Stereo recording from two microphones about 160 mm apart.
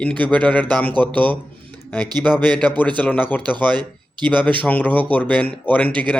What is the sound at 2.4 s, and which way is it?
Speech, 10° left (ahead or behind).